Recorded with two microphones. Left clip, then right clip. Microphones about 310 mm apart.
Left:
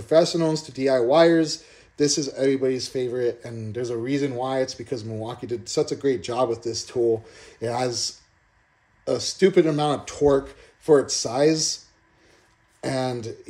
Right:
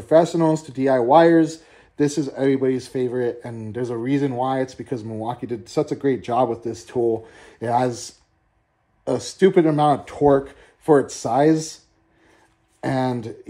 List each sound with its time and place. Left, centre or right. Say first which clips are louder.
0.0 s speech: right 3 dB; centre
12.8 s speech: right 3 dB; centre